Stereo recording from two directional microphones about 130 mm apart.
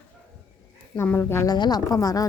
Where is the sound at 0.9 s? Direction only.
15° left (ahead or behind).